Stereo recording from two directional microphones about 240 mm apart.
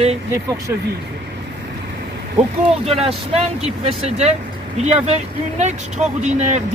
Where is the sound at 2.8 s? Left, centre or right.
Right.